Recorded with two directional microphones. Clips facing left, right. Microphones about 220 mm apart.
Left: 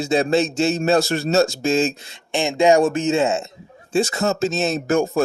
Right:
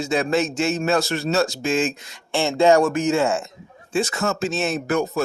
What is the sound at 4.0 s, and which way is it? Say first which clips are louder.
Speech: left 3 dB; 35° left (ahead or behind).